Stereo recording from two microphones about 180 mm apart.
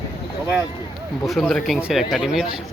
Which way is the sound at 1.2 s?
Centre (ahead or behind).